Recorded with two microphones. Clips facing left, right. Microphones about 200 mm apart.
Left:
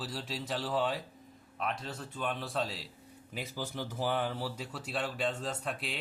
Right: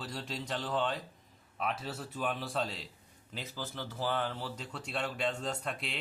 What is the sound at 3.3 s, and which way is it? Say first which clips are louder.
Speech: left 3 dB; 10° left (ahead or behind).